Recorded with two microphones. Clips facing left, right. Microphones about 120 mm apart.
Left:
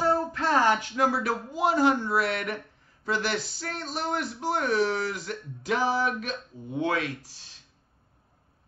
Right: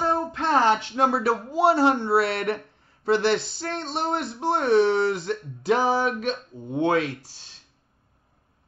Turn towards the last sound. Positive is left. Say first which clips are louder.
# right 5 dB
turn(degrees=-35)  # may be behind; listen again after turning